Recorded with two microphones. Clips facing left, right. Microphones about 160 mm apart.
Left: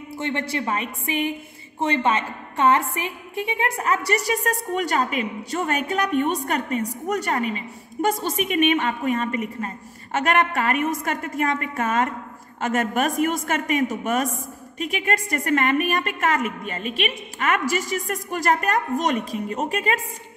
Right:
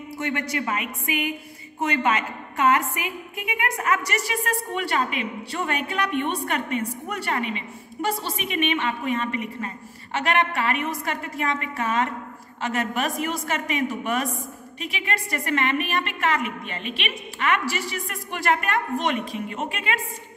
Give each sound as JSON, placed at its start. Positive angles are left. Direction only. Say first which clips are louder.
{"t": 0.1, "sound": "a woman's voice", "louder": "left 1 dB", "side_deg": 25}